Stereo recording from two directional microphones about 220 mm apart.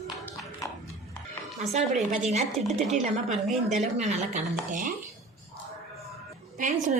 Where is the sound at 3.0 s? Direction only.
30° right (ahead or behind).